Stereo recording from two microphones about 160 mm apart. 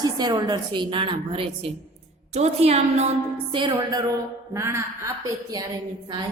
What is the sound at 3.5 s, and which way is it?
A woman's voice, 25° right (ahead or behind).